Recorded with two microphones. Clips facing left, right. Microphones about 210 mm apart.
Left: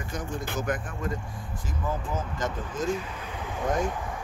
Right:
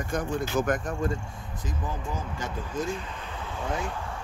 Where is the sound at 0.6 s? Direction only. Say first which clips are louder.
Right 3 dB; 45° right (ahead or behind).